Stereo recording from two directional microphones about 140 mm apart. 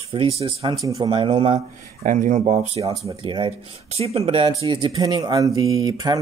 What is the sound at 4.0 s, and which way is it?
Speech, 45° right (ahead or behind).